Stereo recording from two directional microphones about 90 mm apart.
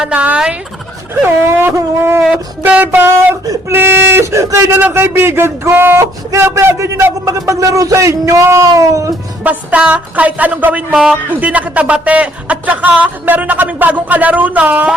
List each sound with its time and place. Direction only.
0.1 s speech: 15° right (ahead or behind)
1.3 s speech: 25° right (ahead or behind)
2.3 s speech: 15° right (ahead or behind); by 9.1 s 40° right (ahead or behind)
9.4 s speech: 15° right (ahead or behind)